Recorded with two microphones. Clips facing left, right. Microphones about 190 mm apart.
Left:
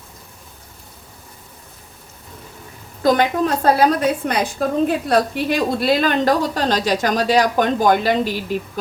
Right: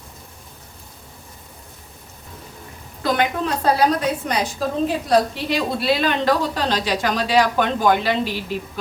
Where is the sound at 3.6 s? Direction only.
55° left (ahead or behind).